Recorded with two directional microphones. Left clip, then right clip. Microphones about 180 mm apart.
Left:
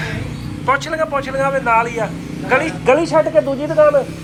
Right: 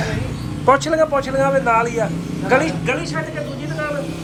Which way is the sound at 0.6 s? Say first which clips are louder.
Right 3 dB; 30° right (ahead or behind).